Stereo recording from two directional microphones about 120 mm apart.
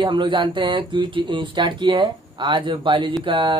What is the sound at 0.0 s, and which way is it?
A woman's voice, 40° right (ahead or behind).